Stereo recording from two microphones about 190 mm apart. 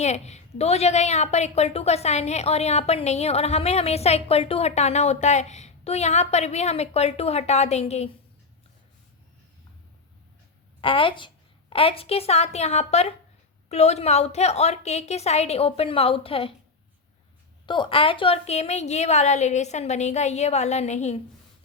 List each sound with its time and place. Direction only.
0.0 s a woman's voice: 35° left (ahead or behind)
10.8 s a woman's voice: 25° left (ahead or behind)
17.7 s a woman's voice: 25° left (ahead or behind)